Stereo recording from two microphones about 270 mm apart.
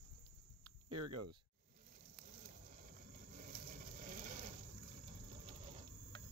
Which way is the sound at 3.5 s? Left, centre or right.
Right.